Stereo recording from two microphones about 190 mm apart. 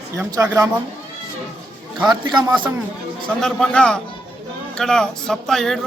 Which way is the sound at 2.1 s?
25° right (ahead or behind).